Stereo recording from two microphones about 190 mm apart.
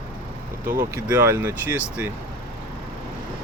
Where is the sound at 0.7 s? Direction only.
15° right (ahead or behind).